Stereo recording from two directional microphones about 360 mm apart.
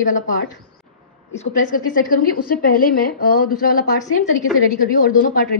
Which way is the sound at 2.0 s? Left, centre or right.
Left.